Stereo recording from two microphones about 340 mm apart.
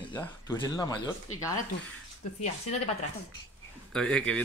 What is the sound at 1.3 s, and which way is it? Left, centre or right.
Speech, left.